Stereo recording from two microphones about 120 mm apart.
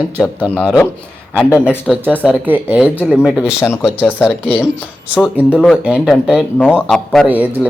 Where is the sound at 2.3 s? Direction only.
15° right (ahead or behind).